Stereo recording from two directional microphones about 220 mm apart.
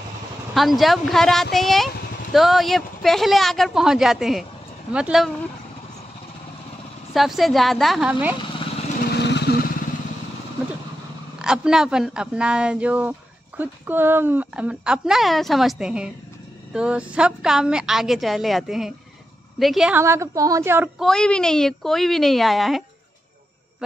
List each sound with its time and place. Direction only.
0.6 s speech: centre (ahead or behind)
7.2 s speech: centre (ahead or behind)
9.0 s vehicle: 50° left (ahead or behind)
11.3 s a woman's voice: 5° right (ahead or behind)
21.0 s speech: 5° left (ahead or behind)